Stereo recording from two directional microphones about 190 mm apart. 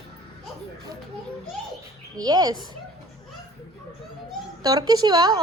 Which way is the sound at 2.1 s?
20° right (ahead or behind).